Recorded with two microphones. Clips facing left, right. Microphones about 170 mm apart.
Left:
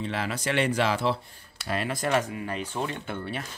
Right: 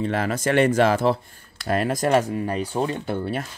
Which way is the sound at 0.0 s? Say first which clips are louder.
Right 7 dB; 50° right (ahead or behind).